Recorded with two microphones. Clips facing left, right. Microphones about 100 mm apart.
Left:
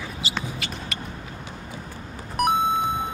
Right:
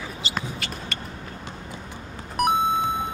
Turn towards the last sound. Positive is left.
turn(degrees=0)  # may be behind; listen again after turning